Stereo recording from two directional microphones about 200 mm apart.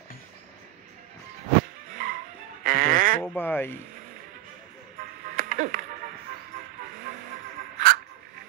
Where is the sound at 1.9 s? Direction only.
45° right (ahead or behind).